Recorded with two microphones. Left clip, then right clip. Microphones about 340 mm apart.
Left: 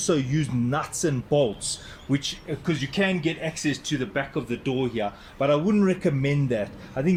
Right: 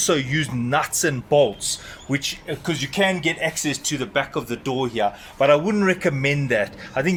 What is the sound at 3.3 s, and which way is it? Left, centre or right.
Speech, right.